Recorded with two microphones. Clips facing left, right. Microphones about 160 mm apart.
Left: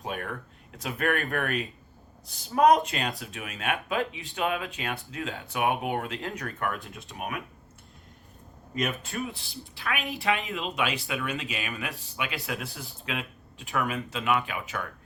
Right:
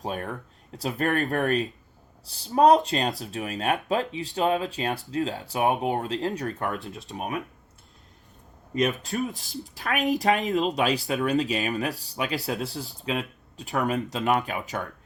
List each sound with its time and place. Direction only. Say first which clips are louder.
0.0 s speech: right 3 dB; 35° right (ahead or behind)
8.8 s speech: right 5 dB; 35° right (ahead or behind)